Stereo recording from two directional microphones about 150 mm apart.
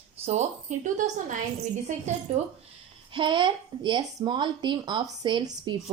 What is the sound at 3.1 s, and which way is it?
Speech, 35° right (ahead or behind).